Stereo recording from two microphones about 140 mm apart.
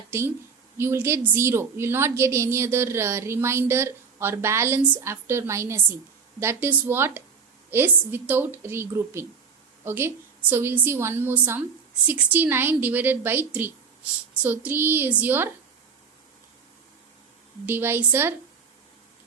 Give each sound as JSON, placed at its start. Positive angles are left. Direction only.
{"t": 0.1, "sound": "a woman's voice", "side_deg": -20}
{"t": 17.7, "sound": "a woman's voice", "side_deg": -15}